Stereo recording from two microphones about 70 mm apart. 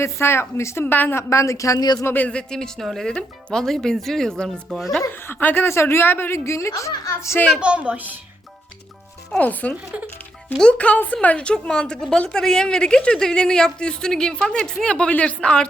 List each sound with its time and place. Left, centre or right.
0.0 s a woman's voice: left
1.3 s speech: left
2.2 s a woman's voice: centre
5.1 s a woman's voice: left
7.6 s a woman's voice: centre
9.4 s a woman's voice: left